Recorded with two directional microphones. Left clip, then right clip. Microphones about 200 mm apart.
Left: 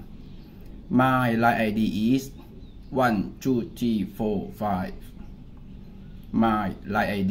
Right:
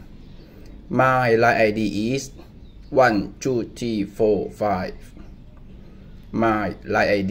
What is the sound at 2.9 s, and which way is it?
Speech, 25° right (ahead or behind).